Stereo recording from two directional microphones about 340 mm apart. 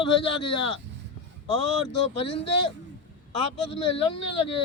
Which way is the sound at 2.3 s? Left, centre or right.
Left.